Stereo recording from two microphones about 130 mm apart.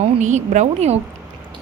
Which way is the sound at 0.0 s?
65° right (ahead or behind).